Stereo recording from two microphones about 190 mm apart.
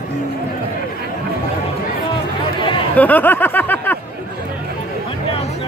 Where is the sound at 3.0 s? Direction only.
10° left (ahead or behind).